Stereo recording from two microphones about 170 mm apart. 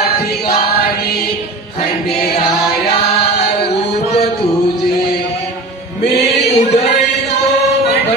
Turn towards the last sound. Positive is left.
turn(degrees=40)  # may be behind; listen again after turning